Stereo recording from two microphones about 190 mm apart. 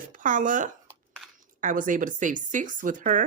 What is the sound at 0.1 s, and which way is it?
Speech, 45° right (ahead or behind).